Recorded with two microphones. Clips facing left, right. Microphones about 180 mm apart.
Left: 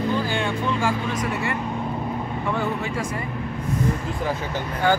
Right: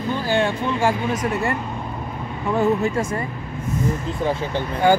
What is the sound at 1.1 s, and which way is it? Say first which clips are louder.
Speech: right 3 dB; 45° right (ahead or behind).